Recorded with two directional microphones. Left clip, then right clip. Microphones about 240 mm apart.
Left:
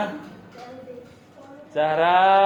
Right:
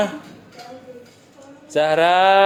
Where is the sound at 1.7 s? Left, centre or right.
Right.